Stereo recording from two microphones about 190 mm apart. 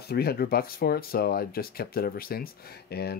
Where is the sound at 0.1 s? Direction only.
55° left (ahead or behind).